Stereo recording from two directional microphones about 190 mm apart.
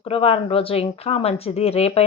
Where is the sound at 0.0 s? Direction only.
30° left (ahead or behind).